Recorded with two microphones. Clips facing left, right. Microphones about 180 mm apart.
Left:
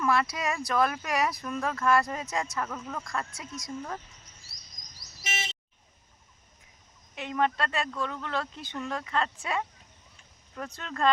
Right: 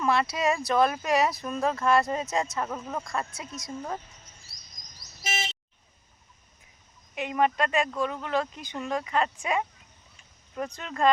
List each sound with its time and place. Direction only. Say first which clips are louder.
0.0 s speech: right 2 dB; 25° right (ahead or behind)
5.2 s vehicle: right 4 dB; 30° right (ahead or behind)
7.2 s speech: right 3 dB; 15° right (ahead or behind)